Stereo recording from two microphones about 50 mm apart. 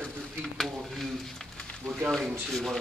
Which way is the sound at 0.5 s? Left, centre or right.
Centre.